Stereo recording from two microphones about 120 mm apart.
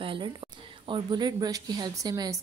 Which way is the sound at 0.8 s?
40° right (ahead or behind).